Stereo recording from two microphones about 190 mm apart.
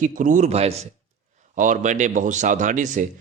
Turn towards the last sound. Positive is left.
turn(degrees=-40)  # may be behind; listen again after turning